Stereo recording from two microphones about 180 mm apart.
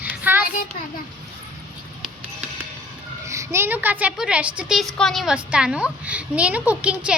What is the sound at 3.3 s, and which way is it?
A child's voice, 15° right (ahead or behind).